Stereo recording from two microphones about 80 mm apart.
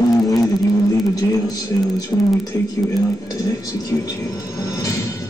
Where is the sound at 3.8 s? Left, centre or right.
Left.